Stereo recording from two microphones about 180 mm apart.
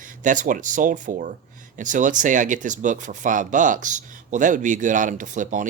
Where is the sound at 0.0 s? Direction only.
45° right (ahead or behind).